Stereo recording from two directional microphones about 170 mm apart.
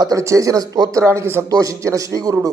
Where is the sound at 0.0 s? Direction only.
20° right (ahead or behind).